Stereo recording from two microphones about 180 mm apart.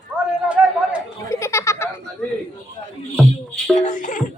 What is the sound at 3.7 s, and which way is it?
Music, 45° left (ahead or behind).